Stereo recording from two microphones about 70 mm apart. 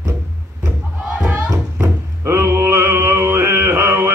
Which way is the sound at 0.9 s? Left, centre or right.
Centre.